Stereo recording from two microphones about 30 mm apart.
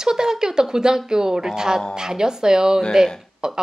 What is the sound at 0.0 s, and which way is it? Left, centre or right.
A woman's voice, centre.